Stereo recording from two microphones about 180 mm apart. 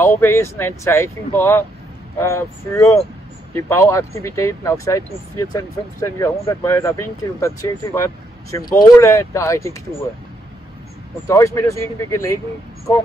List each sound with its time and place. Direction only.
0.2 s speech: 15° left (ahead or behind)
11.2 s speech: 15° left (ahead or behind)